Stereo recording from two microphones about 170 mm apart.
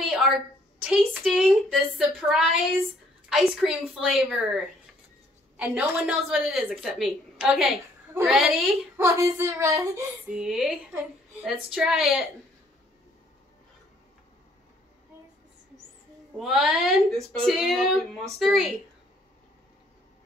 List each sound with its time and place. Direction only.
0.0 s a sound: centre (ahead or behind)
0.8 s a woman's voice: centre (ahead or behind)
8.9 s speech: 15° right (ahead or behind)
10.3 s a woman's voice: 5° right (ahead or behind)
16.3 s a woman's voice: centre (ahead or behind)